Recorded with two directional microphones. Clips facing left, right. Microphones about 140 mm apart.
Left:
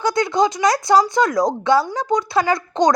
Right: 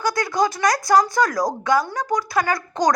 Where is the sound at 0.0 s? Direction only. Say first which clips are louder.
Left 3 dB; 20° left (ahead or behind).